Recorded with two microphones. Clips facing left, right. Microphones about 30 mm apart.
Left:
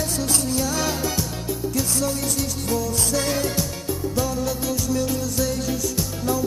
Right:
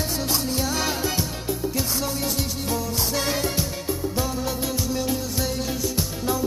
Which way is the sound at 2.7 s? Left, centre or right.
Centre.